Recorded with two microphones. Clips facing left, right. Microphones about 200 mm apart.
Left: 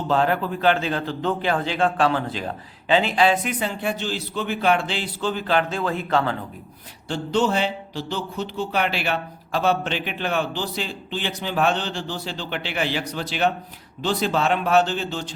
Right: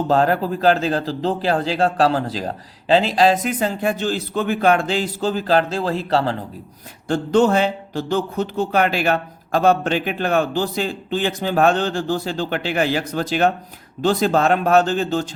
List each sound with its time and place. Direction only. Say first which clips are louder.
0.1 s a man's voice: right 2 dB; 40° right (ahead or behind)
7.1 s speech: right 6 dB; 50° right (ahead or behind)